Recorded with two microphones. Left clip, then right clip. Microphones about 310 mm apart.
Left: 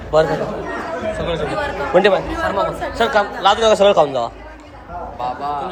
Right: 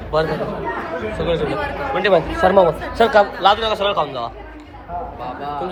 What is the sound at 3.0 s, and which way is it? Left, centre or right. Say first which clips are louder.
Speech: right 2 dB; centre.